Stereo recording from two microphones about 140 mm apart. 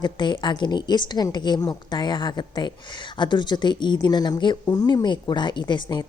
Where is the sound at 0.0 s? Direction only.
35° left (ahead or behind).